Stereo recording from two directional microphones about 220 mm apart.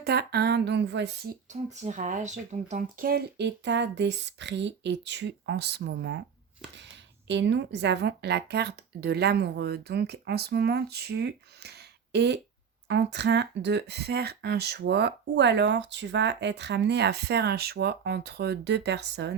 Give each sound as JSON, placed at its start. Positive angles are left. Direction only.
{"t": 0.0, "sound": "speech", "side_deg": -45}
{"t": 1.7, "sound": "speech", "side_deg": -35}
{"t": 7.3, "sound": "speech", "side_deg": -55}